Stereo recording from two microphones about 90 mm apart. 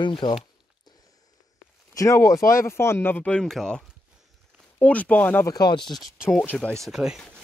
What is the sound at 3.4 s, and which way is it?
Speech, 5° left (ahead or behind).